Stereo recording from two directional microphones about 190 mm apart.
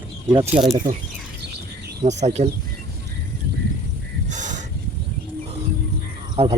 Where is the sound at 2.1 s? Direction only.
35° right (ahead or behind).